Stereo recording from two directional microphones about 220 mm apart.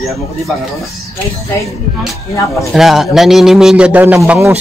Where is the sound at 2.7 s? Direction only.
Centre (ahead or behind).